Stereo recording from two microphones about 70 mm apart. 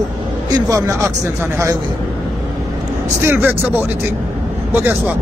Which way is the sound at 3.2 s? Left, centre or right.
Right.